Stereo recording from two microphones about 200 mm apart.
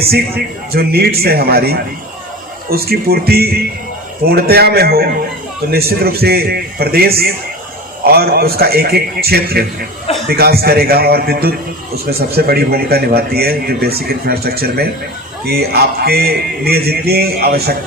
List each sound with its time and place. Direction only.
0.0 s a man's voice: 50° right (ahead or behind)